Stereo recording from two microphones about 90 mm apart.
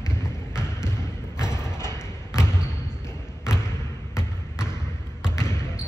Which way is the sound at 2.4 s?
30° left (ahead or behind).